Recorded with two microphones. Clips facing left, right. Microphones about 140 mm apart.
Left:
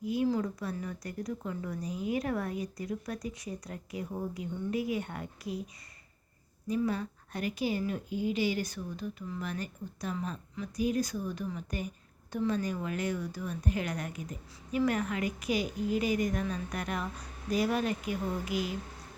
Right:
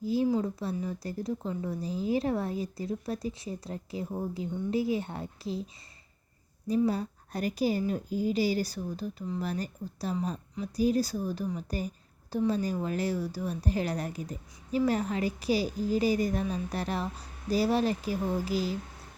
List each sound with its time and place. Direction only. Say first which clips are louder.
0.0 s a woman's voice: right 3 dB; 30° right (ahead or behind)
6.7 s a woman's voice: right 4 dB; 35° right (ahead or behind)